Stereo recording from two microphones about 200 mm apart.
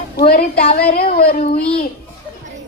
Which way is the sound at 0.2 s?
50° left (ahead or behind).